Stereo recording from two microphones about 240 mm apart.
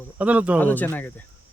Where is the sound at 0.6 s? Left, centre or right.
Centre.